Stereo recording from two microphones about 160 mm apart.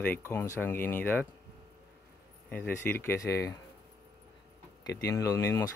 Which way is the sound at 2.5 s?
10° left (ahead or behind).